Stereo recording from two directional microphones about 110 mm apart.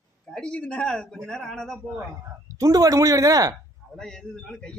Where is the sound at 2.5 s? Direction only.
30° right (ahead or behind).